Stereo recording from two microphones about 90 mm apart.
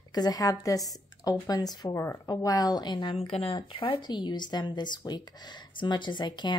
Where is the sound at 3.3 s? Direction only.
85° left.